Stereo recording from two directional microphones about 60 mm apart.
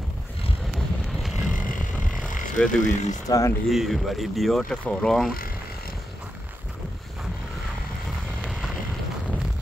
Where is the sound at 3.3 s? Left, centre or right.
Left.